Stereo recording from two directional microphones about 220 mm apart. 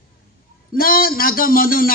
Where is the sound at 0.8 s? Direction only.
40° left (ahead or behind).